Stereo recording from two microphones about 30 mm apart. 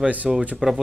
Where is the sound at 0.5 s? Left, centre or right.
Centre.